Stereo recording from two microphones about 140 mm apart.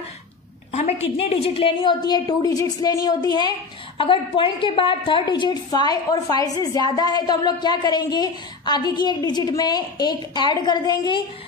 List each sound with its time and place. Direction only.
0.7 s a woman's voice: 50° left (ahead or behind); by 11.2 s 30° left (ahead or behind)